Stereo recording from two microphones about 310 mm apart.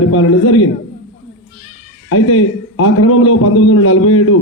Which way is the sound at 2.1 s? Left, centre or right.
Left.